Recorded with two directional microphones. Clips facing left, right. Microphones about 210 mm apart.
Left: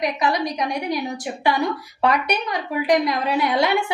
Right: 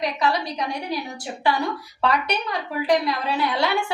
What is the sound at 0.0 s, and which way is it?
Speech, 15° left (ahead or behind).